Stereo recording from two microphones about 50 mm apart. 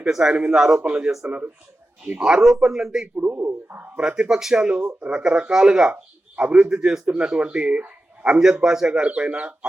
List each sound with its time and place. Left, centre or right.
0.0 s speech: centre
2.1 s speech: centre
3.2 s speech: right
3.9 s speech: centre
8.6 s speech: centre
8.9 s speech: right